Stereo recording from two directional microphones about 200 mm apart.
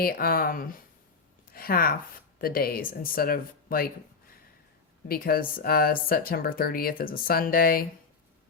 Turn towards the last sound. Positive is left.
turn(degrees=45)  # may be behind; listen again after turning